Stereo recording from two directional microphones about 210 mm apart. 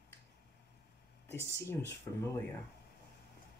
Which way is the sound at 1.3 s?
10° left (ahead or behind).